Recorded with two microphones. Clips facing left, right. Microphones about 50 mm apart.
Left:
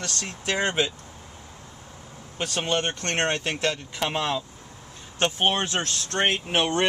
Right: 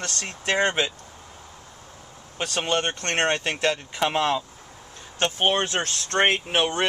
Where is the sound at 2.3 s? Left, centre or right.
Centre.